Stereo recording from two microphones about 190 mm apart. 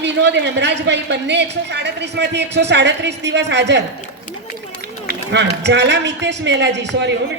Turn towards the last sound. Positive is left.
turn(degrees=-70)  # may be behind; listen again after turning